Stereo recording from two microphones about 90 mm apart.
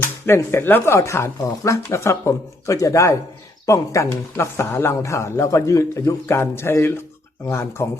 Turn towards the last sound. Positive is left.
turn(degrees=30)  # may be behind; listen again after turning